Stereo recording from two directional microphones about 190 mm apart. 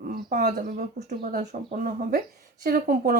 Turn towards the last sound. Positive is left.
turn(degrees=-50)  # may be behind; listen again after turning